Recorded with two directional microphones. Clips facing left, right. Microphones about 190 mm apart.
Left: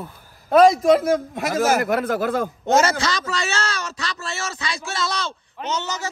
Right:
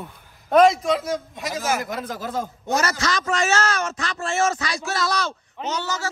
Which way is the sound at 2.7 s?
25° left (ahead or behind).